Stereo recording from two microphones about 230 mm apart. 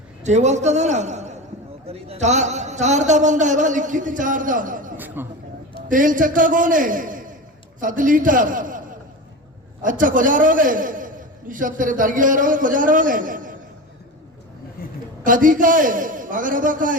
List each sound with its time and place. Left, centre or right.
0.2 s a man's voice: right
4.9 s a sound: centre
5.9 s a man's voice: right
9.8 s a man's voice: right
15.2 s a man's voice: right